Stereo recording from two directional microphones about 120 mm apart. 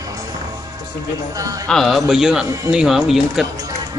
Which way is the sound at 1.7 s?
Centre (ahead or behind).